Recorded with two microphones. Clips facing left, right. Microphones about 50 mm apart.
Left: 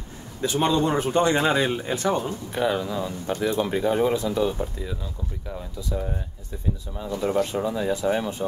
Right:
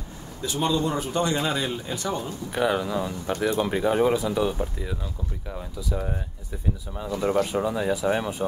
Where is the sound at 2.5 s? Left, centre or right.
Centre.